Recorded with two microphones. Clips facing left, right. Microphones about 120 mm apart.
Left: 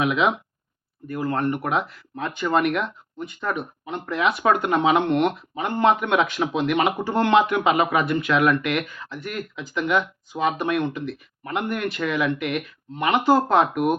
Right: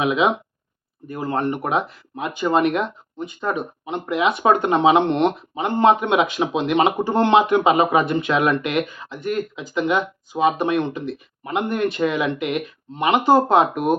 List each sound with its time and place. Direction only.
0.0 s speech: 20° right (ahead or behind)